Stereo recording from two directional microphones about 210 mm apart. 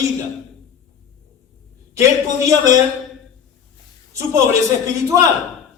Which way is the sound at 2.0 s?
15° right (ahead or behind).